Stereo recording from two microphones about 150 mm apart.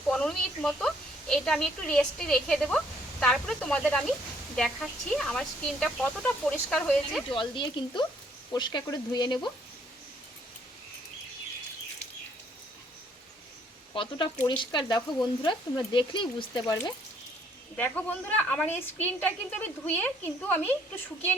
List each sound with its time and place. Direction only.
0.1 s a woman's voice: 5° left (ahead or behind)
7.3 s speech: 35° left (ahead or behind)
13.9 s speech: 35° left (ahead or behind)
17.7 s a woman's voice: 10° left (ahead or behind)